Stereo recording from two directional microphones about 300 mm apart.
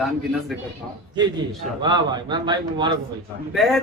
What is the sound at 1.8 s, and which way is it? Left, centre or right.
A man's voice, centre.